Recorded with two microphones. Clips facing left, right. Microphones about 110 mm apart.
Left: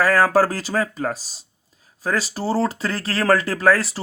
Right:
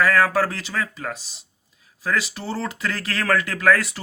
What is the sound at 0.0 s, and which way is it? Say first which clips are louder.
Speech: left 3 dB; 35° left (ahead or behind).